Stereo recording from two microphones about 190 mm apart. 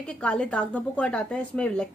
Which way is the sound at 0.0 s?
5° left (ahead or behind).